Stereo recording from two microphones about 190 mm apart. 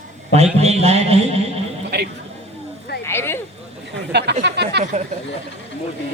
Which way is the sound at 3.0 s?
10° left (ahead or behind).